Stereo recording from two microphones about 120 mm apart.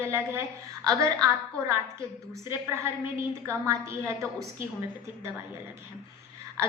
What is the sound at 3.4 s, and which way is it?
Speech, 25° right (ahead or behind).